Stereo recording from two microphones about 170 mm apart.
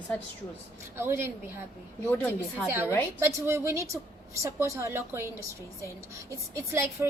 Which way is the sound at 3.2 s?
15° right (ahead or behind).